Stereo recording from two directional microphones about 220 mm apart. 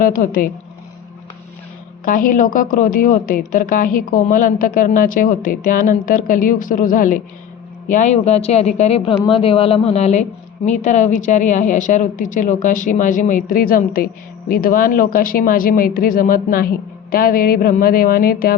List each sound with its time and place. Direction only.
0.0 s a woman's voice: 40° left (ahead or behind)
2.0 s a woman's voice: 40° left (ahead or behind)